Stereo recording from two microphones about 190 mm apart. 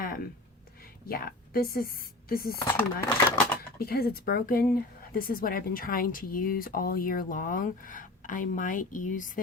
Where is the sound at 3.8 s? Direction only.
55° left (ahead or behind).